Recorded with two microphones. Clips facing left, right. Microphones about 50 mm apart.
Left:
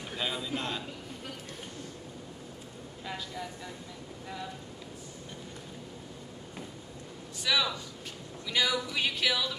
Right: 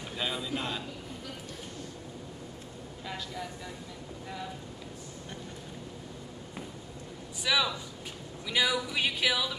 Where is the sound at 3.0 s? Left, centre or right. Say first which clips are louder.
Even; centre.